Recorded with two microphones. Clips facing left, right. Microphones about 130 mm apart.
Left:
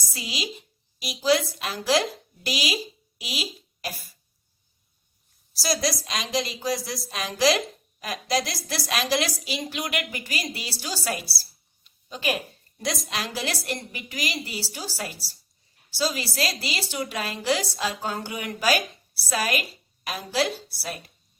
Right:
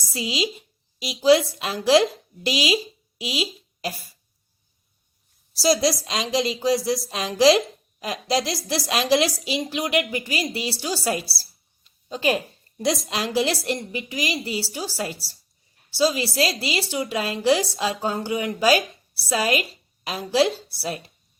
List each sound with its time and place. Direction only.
0.1 s a woman's voice: 25° right (ahead or behind)
5.6 s a woman's voice: 25° right (ahead or behind)